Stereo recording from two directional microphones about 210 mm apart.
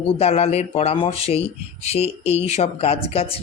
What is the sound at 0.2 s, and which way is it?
Speech, 30° left (ahead or behind).